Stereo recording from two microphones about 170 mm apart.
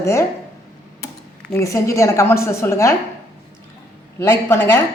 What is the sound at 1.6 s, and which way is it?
A woman's voice, 15° left (ahead or behind).